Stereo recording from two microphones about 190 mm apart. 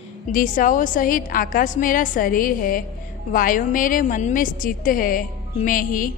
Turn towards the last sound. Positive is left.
turn(degrees=45)  # may be behind; listen again after turning